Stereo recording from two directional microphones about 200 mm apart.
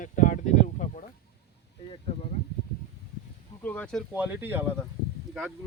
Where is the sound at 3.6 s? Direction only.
10° left (ahead or behind).